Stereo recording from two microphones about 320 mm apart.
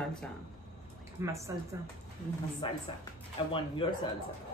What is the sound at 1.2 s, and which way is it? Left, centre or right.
Speech, centre.